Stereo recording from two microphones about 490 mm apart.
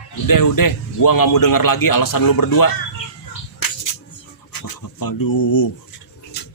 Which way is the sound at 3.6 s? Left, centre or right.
Left.